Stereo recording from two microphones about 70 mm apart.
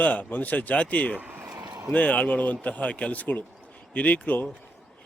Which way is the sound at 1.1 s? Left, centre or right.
Right.